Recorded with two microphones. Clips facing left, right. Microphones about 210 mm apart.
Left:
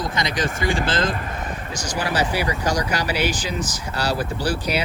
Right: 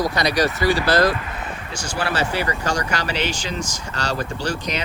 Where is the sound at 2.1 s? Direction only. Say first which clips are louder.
Left 1 dB; 10° left (ahead or behind).